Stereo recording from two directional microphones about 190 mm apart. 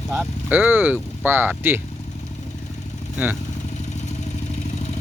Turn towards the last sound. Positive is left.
turn(degrees=35)  # may be behind; listen again after turning